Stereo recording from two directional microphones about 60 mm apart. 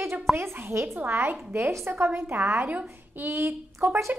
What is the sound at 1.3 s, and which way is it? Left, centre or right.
Speech, right.